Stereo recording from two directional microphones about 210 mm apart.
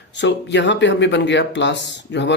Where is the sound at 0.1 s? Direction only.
60° left (ahead or behind).